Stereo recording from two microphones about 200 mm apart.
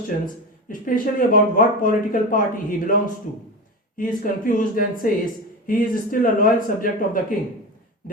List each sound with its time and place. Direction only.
0.7 s speech: 45° left (ahead or behind)
3.9 s speech: 40° left (ahead or behind)